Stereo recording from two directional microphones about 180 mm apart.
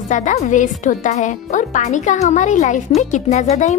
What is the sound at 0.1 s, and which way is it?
Speech, 40° left (ahead or behind).